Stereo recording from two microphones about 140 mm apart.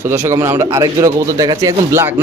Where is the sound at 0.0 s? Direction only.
20° right (ahead or behind).